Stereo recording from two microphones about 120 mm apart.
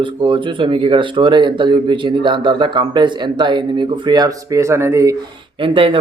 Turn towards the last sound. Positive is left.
turn(degrees=-45)  # may be behind; listen again after turning